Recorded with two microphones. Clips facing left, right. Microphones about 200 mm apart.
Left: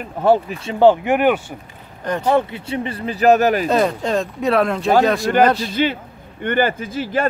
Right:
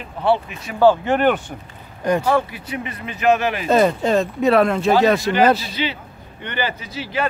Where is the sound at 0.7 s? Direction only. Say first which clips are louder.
Left 2 dB; 20° left (ahead or behind).